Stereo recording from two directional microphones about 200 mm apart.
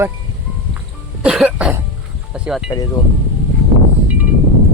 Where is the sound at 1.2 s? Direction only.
5° right (ahead or behind).